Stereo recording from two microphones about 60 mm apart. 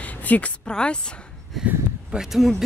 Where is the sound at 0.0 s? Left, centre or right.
Left.